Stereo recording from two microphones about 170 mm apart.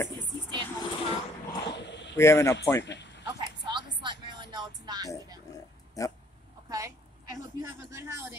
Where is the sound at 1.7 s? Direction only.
90° left.